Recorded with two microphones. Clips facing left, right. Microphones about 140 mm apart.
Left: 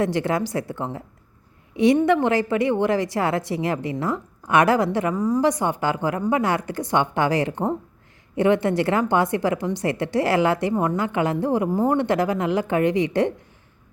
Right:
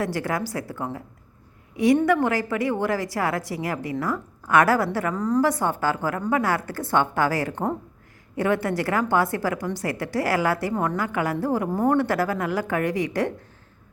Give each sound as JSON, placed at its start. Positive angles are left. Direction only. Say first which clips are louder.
{"t": 0.0, "sound": "a woman's voice", "louder": "left 4 dB", "side_deg": 25}